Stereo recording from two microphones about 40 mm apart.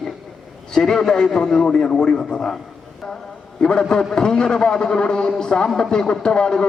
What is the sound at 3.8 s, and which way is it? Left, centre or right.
A man's voice, centre.